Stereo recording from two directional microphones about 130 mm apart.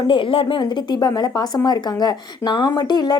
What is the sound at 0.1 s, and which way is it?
A woman's voice, 40° left (ahead or behind).